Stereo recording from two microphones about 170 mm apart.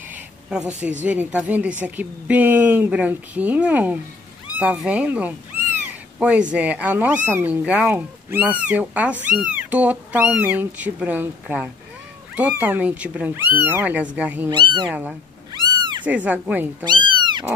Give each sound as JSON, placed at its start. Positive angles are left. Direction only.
{"t": 0.1, "sound": "a sound", "side_deg": -5}
{"t": 1.0, "sound": "speech", "side_deg": -10}
{"t": 4.5, "sound": "cat", "side_deg": -10}
{"t": 6.5, "sound": "speech", "side_deg": -10}
{"t": 14.5, "sound": "speech", "side_deg": -30}
{"t": 14.9, "sound": "speech", "side_deg": -5}
{"t": 16.8, "sound": "speech", "side_deg": -25}